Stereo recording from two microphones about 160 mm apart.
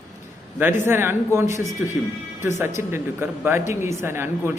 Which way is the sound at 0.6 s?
15° right (ahead or behind).